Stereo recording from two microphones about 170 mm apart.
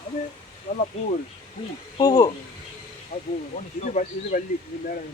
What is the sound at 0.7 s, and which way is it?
Speech, 40° left (ahead or behind).